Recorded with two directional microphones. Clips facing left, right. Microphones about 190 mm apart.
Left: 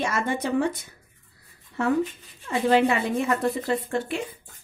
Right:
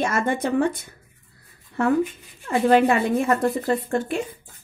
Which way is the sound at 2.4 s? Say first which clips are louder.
Right 3 dB; 55° right (ahead or behind).